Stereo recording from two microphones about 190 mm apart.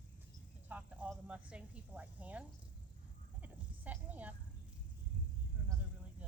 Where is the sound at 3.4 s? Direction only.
10° right (ahead or behind).